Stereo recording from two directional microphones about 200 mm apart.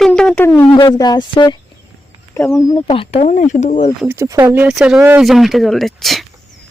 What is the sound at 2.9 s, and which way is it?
Speech, 30° left (ahead or behind).